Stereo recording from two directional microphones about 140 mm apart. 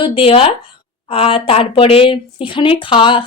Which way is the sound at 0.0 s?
40° left (ahead or behind).